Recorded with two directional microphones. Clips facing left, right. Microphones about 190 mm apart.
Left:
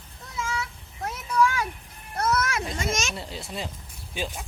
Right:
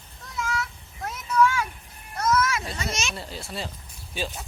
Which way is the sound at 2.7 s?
50° left (ahead or behind).